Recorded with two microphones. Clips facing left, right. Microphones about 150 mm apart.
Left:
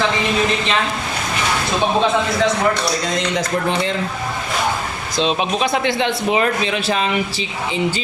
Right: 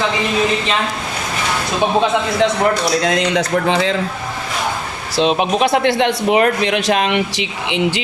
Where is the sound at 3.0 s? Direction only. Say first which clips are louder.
Right 4 dB; 80° right.